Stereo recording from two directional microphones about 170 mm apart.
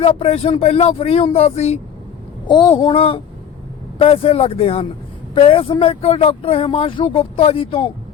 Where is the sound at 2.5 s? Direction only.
30° left (ahead or behind).